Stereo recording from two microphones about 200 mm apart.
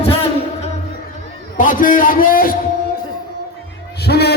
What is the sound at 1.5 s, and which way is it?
A man's voice, 40° left (ahead or behind).